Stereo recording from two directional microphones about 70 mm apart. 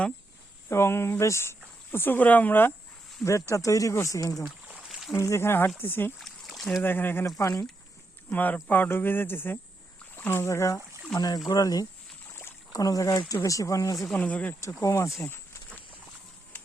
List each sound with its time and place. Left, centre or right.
0.7 s speech: left
3.5 s speech: left
4.4 s a sound: centre
5.1 s speech: left
6.1 s a sound: centre
6.8 s speech: left
7.3 s speech: left
8.3 s speech: left
11.1 s speech: centre
11.4 s speech: left
14.2 s speech: left
14.8 s speech: left